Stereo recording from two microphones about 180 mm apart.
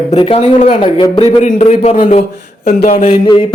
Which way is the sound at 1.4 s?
40° left (ahead or behind).